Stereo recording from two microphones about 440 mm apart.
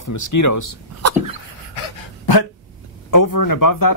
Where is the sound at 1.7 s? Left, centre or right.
Left.